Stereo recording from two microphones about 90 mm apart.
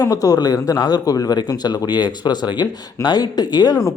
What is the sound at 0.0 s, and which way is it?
A man's voice, 45° left (ahead or behind).